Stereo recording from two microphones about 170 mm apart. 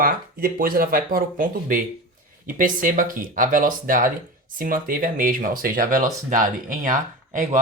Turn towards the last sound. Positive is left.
turn(degrees=-50)  # may be behind; listen again after turning